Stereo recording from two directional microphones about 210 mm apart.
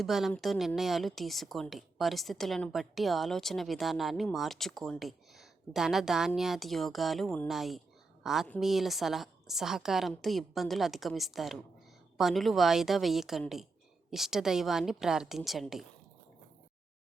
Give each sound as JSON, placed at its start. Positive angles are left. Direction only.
{"t": 0.0, "sound": "a woman's voice", "side_deg": 0}